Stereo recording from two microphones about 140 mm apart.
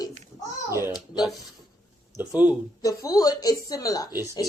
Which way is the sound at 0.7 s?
20° right (ahead or behind).